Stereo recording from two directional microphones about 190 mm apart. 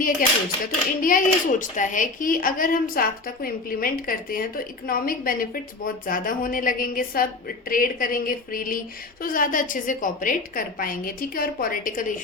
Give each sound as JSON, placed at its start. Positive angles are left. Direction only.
{"t": 0.0, "sound": "speech", "side_deg": 45}